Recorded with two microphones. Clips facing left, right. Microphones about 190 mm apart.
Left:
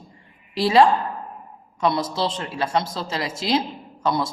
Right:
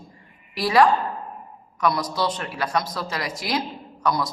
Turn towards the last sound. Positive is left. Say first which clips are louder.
# left 1 dB
turn(degrees=25)  # may be behind; listen again after turning